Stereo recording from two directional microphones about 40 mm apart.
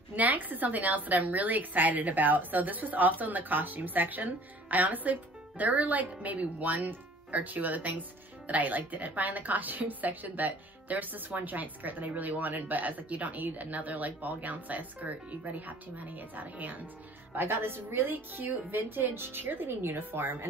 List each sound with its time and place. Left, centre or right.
0.1 s a woman's voice: right
17.3 s a woman's voice: right
20.0 s a woman's voice: right